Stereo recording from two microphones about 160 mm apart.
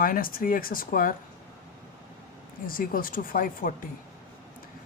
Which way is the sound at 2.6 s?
65° left (ahead or behind).